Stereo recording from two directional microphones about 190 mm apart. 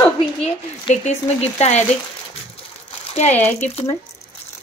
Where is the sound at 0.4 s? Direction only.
35° left (ahead or behind).